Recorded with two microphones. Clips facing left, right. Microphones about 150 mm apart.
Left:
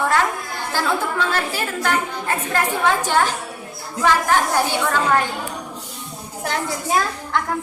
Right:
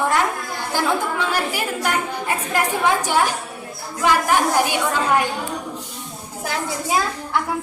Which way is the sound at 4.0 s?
15° right (ahead or behind).